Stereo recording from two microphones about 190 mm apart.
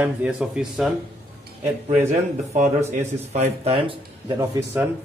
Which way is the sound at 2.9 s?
40° right (ahead or behind).